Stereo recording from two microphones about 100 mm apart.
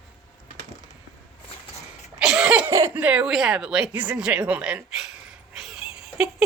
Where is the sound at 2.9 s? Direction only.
15° right (ahead or behind).